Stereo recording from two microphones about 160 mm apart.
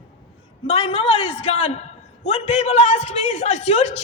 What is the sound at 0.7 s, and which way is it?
A man's voice, 40° left (ahead or behind).